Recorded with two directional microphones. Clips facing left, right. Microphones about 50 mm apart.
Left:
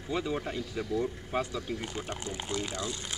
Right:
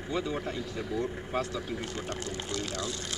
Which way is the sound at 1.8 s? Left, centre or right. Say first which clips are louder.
Right 1 dB; centre.